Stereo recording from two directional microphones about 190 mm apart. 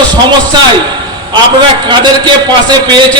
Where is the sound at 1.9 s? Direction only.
20° right (ahead or behind).